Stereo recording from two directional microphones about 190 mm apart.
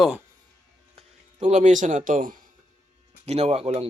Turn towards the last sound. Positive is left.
turn(degrees=-30)  # may be behind; listen again after turning